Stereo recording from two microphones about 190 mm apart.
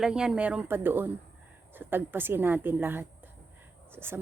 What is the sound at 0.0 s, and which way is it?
Speech, 5° right (ahead or behind).